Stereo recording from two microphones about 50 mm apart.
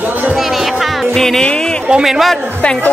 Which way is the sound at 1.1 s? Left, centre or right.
Centre.